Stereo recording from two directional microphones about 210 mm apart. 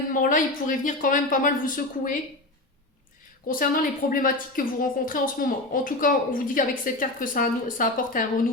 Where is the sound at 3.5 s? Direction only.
40° left (ahead or behind).